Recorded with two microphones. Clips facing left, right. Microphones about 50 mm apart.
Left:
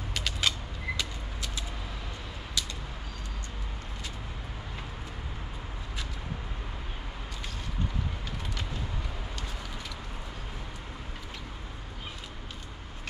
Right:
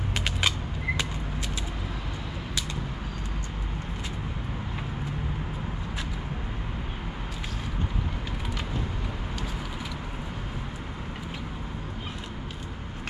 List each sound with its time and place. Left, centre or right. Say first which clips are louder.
0.1 s creak: right 3 dB; right